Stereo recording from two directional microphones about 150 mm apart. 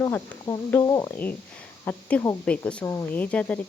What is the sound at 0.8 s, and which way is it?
Speech, 25° left (ahead or behind).